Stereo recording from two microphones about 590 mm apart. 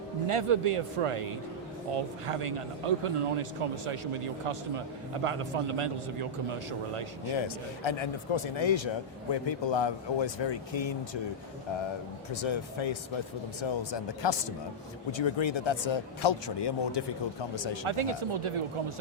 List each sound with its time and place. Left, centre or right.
0.3 s speech: right
2.2 s speech: right
7.4 s speech: left
12.3 s speech: left
17.8 s speech: right